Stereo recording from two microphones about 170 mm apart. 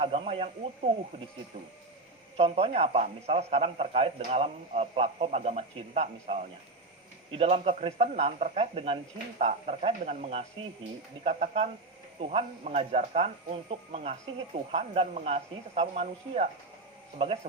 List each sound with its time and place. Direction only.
0.0 s speech: 35° right (ahead or behind)
2.3 s speech: 40° right (ahead or behind)